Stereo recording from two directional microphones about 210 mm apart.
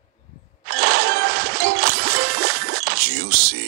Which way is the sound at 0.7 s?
45° right (ahead or behind).